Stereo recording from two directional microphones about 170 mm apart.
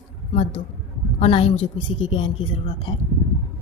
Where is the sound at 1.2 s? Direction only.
35° left (ahead or behind).